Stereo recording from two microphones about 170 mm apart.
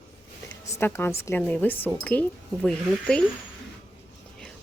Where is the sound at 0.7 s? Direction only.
15° left (ahead or behind).